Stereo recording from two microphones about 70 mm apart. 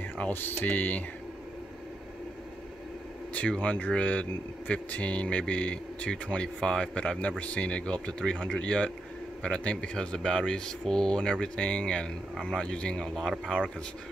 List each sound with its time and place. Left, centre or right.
0.2 s speech: left
3.3 s speech: centre